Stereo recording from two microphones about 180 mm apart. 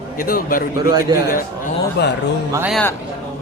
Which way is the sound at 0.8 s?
20° right (ahead or behind).